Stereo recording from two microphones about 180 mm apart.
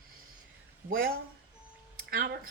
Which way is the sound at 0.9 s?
55° right (ahead or behind).